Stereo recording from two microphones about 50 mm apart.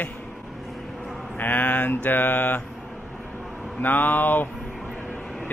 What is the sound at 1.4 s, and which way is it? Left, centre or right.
Speech, left.